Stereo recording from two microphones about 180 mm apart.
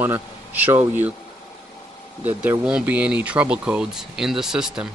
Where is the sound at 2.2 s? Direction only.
10° right (ahead or behind).